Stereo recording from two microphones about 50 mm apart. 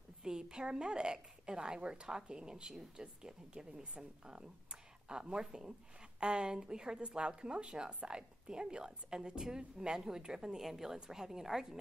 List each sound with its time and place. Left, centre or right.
0.2 s a woman's voice: centre